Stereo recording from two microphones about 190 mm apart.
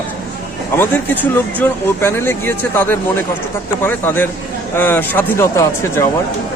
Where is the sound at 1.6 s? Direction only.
10° left (ahead or behind).